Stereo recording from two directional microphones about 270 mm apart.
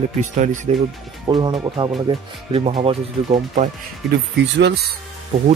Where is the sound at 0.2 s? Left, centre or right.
Right.